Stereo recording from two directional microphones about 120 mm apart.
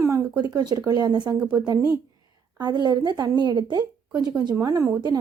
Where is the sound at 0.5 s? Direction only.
35° right (ahead or behind).